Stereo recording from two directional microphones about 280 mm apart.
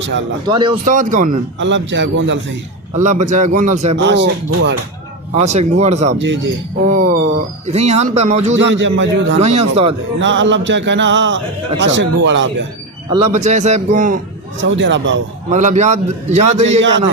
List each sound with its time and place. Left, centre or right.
0.4 s a man's voice: centre
1.5 s music: right
3.0 s a man's voice: right
3.9 s music: right
5.3 s a man's voice: right
6.1 s music: right
6.8 s a man's voice: right
8.5 s music: right
9.4 s a man's voice: right
10.2 s music: right
13.1 s a man's voice: right
14.6 s music: right
15.4 s a man's voice: right